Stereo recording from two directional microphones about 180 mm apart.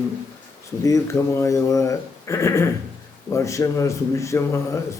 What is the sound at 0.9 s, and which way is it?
A man's voice, 15° left (ahead or behind).